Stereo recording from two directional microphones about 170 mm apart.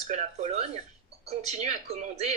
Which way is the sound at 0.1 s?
40° right (ahead or behind).